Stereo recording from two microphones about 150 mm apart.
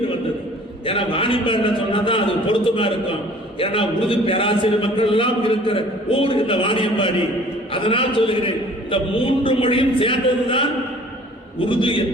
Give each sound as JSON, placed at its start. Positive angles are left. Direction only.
{"t": 0.9, "sound": "a man's voice", "side_deg": 35}
{"t": 11.7, "sound": "a man's voice", "side_deg": 35}